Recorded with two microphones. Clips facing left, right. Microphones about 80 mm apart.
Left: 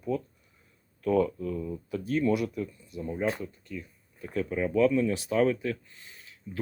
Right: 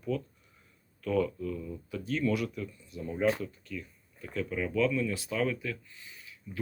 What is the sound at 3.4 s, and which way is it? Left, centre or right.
Speech, centre.